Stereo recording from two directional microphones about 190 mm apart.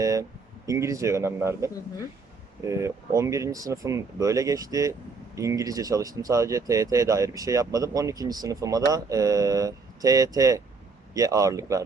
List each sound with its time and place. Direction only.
0.0 s speech: 15° right (ahead or behind)